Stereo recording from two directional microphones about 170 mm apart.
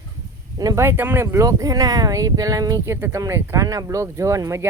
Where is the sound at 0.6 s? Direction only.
20° right (ahead or behind).